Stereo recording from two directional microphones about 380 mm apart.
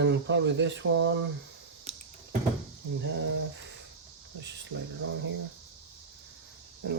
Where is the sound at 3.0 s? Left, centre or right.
Right.